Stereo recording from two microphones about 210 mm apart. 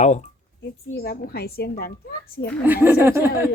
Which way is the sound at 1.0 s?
45° left (ahead or behind).